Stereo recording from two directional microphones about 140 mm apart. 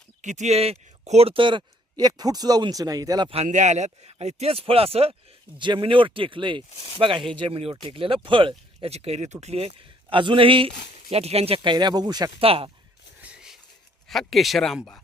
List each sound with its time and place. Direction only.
0.2 s speech: 60° right (ahead or behind); by 3.2 s 25° right (ahead or behind)
3.2 s speech: 50° right (ahead or behind); by 12.3 s 30° right (ahead or behind)
12.4 s speech: 40° right (ahead or behind)
13.2 s a sound: 5° right (ahead or behind)
14.1 s speech: centre (ahead or behind)